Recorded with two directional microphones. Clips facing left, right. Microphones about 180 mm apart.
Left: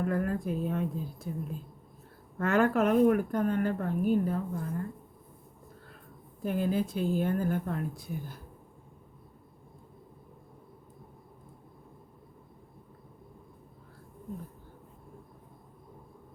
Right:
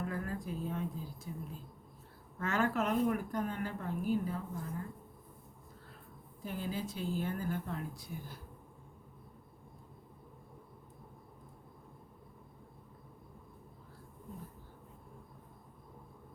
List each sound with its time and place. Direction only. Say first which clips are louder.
0.0 s speech: left 9 dB; 60° left (ahead or behind)
2.4 s speech: left 8 dB; 55° left (ahead or behind)
6.4 s speech: left 10 dB; 55° left (ahead or behind)